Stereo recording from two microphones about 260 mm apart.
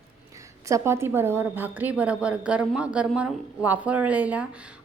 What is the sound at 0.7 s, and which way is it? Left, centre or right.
A woman's voice, centre.